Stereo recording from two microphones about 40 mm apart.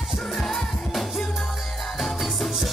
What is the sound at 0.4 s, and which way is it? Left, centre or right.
Music, centre.